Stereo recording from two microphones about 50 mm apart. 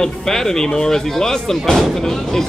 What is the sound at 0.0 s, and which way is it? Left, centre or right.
Speech, centre.